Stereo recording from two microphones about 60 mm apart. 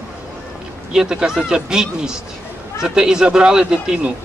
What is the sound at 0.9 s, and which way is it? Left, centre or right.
A man's voice, centre.